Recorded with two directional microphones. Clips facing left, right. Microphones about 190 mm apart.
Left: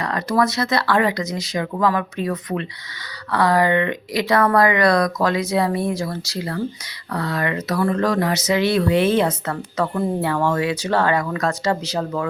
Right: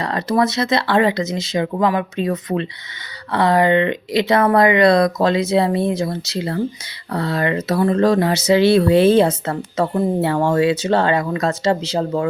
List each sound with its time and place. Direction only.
0.0 s speech: 30° right (ahead or behind)